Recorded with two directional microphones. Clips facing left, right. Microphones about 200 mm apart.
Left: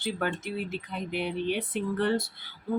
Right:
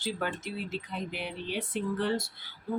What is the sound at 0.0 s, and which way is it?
Speech, 55° left (ahead or behind).